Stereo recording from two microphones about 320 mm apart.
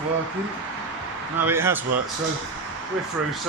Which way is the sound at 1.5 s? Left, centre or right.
Centre.